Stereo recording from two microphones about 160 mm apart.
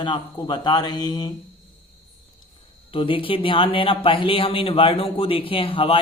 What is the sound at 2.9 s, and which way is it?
Speech, 35° left (ahead or behind).